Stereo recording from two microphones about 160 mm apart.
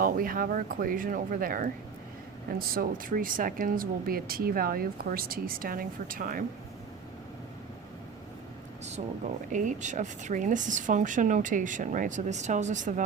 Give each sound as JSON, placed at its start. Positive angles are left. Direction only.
{"t": 0.0, "sound": "speech", "side_deg": -60}
{"t": 9.5, "sound": "a woman's voice", "side_deg": -50}